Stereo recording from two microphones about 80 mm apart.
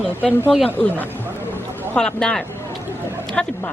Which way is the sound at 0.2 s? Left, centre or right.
Centre.